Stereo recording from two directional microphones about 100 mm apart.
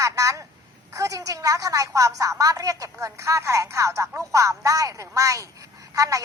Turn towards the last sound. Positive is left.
turn(degrees=-35)  # may be behind; listen again after turning